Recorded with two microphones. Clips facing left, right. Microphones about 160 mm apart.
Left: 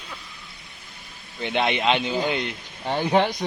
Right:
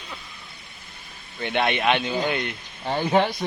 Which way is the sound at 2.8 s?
5° left (ahead or behind).